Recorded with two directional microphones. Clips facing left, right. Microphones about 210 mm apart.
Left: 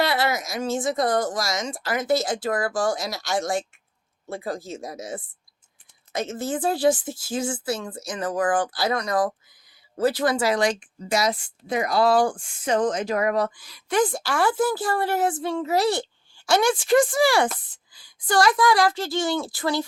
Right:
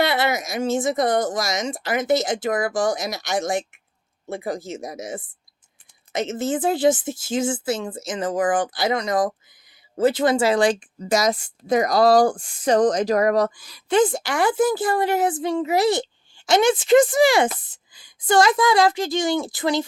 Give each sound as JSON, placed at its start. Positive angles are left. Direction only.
{"t": 0.0, "sound": "a woman's voice", "side_deg": -25}
{"t": 13.8, "sound": "a woman's voice", "side_deg": -25}